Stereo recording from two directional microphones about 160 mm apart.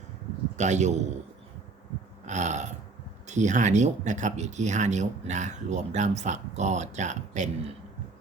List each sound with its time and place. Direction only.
0.5 s speech: 45° right (ahead or behind)
2.2 s burping: 50° right (ahead or behind)
3.2 s speech: 50° right (ahead or behind)